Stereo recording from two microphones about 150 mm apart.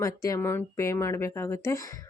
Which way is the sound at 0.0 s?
20° left (ahead or behind).